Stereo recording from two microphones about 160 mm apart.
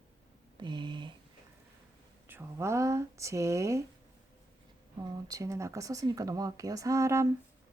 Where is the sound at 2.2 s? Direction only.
15° right (ahead or behind).